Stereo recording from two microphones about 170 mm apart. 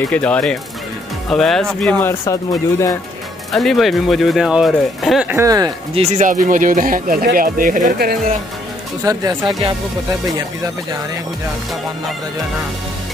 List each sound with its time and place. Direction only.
0.1 s speech: 10° left (ahead or behind)
3.5 s speech: centre (ahead or behind)
5.3 s speech: 20° right (ahead or behind)
5.9 s speech: 45° right (ahead or behind)
9.0 s speech: 20° right (ahead or behind)